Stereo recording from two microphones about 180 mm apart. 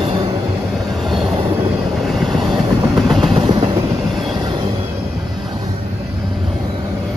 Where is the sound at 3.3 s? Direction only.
25° right (ahead or behind).